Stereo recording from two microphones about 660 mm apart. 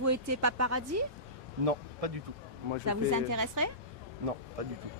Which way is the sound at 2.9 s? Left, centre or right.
Right.